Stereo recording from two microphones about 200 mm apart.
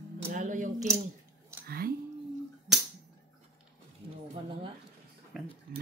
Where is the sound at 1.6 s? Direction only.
50° right (ahead or behind).